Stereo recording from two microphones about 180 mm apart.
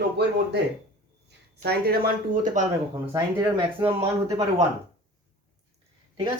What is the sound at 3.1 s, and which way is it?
Speech, 25° right (ahead or behind).